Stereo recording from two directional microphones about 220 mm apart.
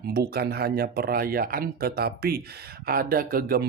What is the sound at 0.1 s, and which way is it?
Speech, 45° right (ahead or behind).